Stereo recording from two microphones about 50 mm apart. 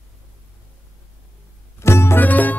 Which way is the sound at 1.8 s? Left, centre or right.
Left.